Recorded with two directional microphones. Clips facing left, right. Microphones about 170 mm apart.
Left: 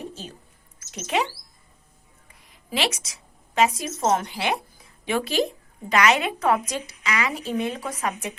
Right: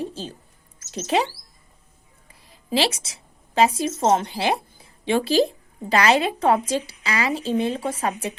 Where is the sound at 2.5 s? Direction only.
30° right (ahead or behind).